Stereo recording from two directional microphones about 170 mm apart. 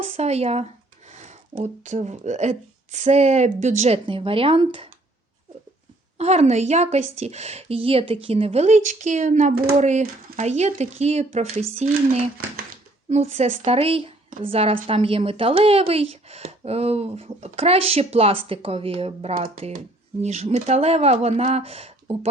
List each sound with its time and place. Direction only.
0.0 s a woman's voice: 40° right (ahead or behind)
6.1 s a woman's voice: 40° right (ahead or behind)